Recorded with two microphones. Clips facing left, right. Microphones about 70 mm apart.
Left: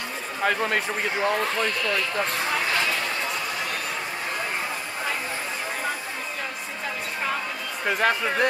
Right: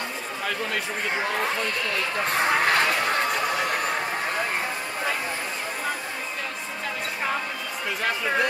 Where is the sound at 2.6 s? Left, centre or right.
Right.